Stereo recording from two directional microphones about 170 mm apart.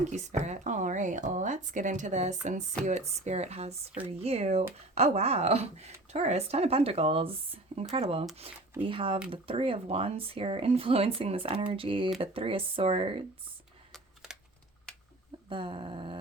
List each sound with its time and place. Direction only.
0.3 s speech: 40° right (ahead or behind)
13.9 s a sound: 5° right (ahead or behind)
15.4 s dog: 30° right (ahead or behind)